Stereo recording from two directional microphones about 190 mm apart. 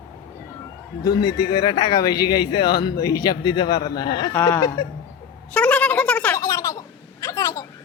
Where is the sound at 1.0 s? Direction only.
20° left (ahead or behind).